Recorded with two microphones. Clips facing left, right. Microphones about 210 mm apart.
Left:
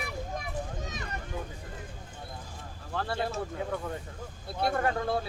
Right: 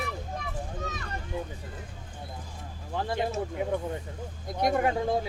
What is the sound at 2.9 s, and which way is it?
Speech, 15° right (ahead or behind).